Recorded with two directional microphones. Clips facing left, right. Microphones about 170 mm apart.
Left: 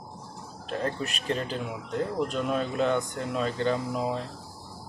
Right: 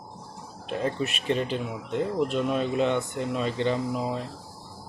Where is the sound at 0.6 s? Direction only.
5° right (ahead or behind).